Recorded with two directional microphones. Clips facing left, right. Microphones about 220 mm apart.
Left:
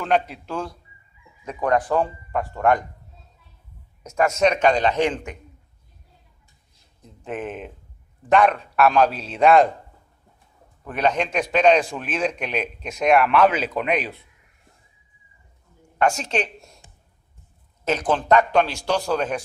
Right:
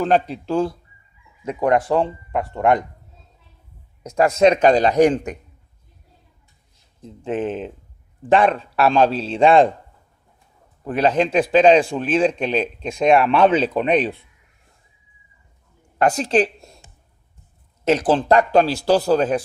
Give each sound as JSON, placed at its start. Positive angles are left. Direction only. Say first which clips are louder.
{"t": 0.0, "sound": "speech", "louder": "right 4 dB", "side_deg": -35}
{"t": 4.0, "sound": "speech", "louder": "right 5 dB", "side_deg": -35}
{"t": 7.0, "sound": "speech", "louder": "right 7 dB", "side_deg": -30}
{"t": 10.8, "sound": "speech", "louder": "right 4 dB", "side_deg": -30}
{"t": 16.0, "sound": "speech", "louder": "right 5 dB", "side_deg": -35}
{"t": 17.8, "sound": "speech", "louder": "right 4 dB", "side_deg": -30}